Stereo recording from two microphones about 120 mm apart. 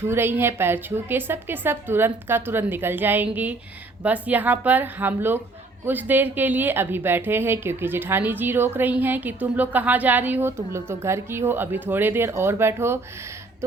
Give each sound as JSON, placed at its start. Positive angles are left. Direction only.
{"t": 0.0, "sound": "a woman's voice", "side_deg": -20}